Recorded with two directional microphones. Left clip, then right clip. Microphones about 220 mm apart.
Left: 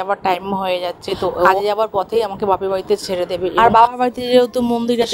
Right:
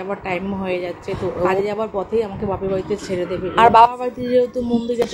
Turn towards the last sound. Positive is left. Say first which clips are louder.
# left 3 dB
turn(degrees=45)  # may be behind; listen again after turning